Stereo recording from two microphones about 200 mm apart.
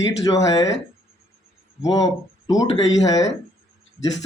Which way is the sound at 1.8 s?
20° left (ahead or behind).